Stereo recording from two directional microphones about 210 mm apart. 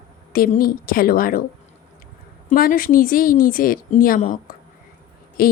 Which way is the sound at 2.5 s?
40° left (ahead or behind).